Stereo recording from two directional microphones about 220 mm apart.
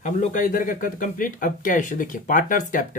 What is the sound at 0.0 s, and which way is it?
Speech, 35° left (ahead or behind).